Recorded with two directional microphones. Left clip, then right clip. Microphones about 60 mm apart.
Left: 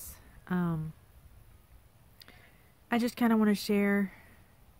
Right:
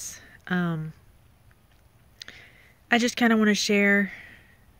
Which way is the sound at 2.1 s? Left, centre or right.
Left.